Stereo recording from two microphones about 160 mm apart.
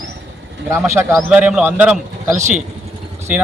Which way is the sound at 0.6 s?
15° right (ahead or behind).